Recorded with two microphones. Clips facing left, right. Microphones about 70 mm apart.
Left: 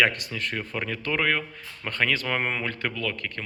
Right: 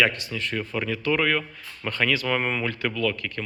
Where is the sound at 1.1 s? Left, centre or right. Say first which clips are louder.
Left 1 dB; left.